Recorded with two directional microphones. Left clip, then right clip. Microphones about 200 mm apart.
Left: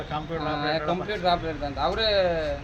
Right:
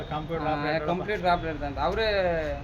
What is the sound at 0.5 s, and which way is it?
Speech, centre (ahead or behind).